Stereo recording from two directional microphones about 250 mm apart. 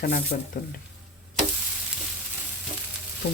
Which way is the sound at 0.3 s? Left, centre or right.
Left.